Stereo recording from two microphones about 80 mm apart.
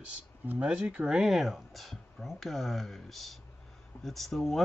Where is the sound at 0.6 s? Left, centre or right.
Centre.